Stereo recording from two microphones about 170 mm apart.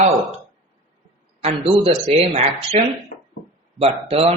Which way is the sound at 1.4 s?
35° right (ahead or behind).